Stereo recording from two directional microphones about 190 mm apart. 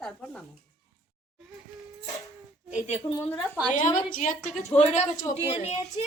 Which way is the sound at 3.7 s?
45° left (ahead or behind).